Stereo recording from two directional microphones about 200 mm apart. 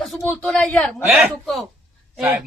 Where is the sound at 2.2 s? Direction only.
10° right (ahead or behind).